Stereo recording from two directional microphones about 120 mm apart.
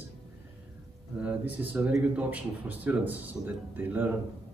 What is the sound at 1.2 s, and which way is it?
Speech, 15° right (ahead or behind).